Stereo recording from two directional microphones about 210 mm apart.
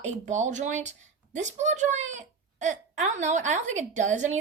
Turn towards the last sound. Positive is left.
turn(degrees=-35)  # may be behind; listen again after turning